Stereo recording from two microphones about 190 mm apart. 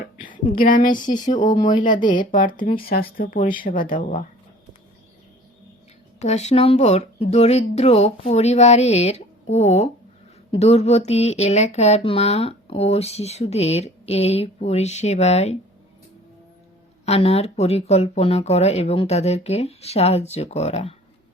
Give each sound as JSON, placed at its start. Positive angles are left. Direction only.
{"t": 0.0, "sound": "speech", "side_deg": 45}
{"t": 6.1, "sound": "speech", "side_deg": 35}
{"t": 17.1, "sound": "speech", "side_deg": 35}